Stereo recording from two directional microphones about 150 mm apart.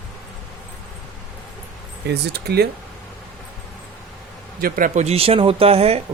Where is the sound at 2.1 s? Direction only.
90° right.